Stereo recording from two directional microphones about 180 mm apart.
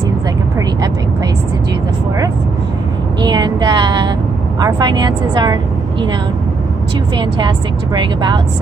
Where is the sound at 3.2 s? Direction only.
25° right (ahead or behind).